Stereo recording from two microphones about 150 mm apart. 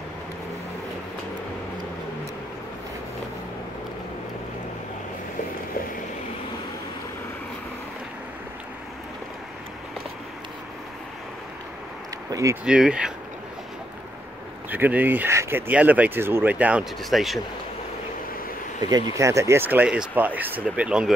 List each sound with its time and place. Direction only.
12.3 s a sound: 20° right (ahead or behind)
12.6 s speech: 5° right (ahead or behind)
14.7 s speech: 10° right (ahead or behind)
18.8 s speech: 25° right (ahead or behind); by 21.1 s 5° right (ahead or behind)